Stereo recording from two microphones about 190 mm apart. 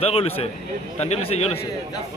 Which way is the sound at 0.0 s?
30° left (ahead or behind).